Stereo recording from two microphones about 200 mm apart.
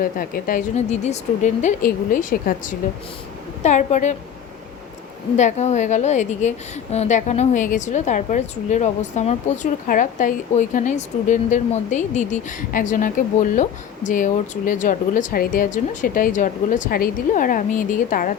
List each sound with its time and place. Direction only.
0.0 s a woman's voice: 45° left (ahead or behind)
5.4 s a woman's voice: 35° left (ahead or behind)